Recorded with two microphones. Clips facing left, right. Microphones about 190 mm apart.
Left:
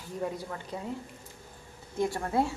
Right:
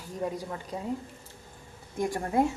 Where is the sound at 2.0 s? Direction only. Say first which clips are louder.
Right 2 dB; 15° right (ahead or behind).